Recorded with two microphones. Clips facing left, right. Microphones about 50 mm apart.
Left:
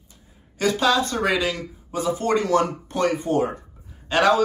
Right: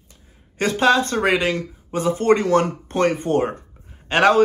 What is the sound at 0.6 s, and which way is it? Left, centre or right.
A man's voice, right.